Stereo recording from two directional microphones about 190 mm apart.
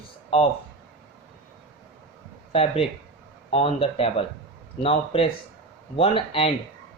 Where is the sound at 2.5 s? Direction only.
30° left (ahead or behind).